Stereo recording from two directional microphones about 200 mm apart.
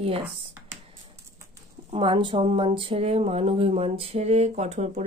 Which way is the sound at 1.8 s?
30° right (ahead or behind).